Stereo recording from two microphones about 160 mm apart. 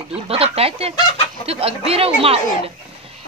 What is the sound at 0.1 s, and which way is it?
Speech, 40° right (ahead or behind).